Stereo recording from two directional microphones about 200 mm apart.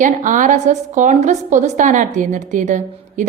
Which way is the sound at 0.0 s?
40° right (ahead or behind).